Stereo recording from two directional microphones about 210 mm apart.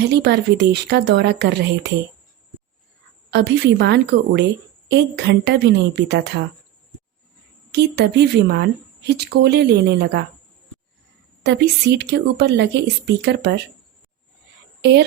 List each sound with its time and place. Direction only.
0.0 s a woman's voice: 50° right (ahead or behind)
3.2 s a woman's voice: 55° right (ahead or behind)
7.7 s a woman's voice: 50° right (ahead or behind)
11.4 s speech: 55° right (ahead or behind)
14.8 s a woman's voice: 50° right (ahead or behind)